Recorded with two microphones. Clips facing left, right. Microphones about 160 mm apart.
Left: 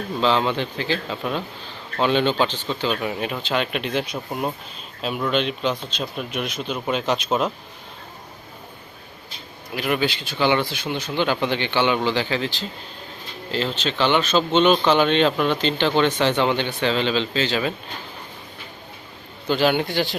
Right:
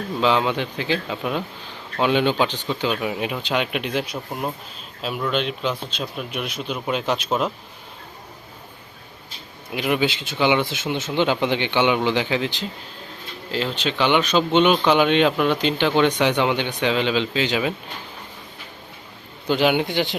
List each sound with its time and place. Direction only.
0.2 s speech: 10° right (ahead or behind)
4.3 s speech: centre (ahead or behind)
9.7 s speech: 15° right (ahead or behind)
19.5 s a man's voice: 15° right (ahead or behind)